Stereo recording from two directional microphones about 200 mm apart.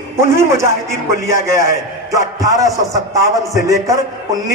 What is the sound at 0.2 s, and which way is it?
Speech, 15° right (ahead or behind).